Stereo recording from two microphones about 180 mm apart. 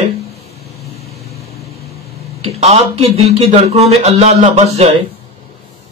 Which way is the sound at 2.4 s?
35° right (ahead or behind).